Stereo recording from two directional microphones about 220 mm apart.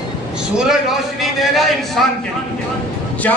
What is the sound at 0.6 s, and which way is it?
A man's voice, centre (ahead or behind).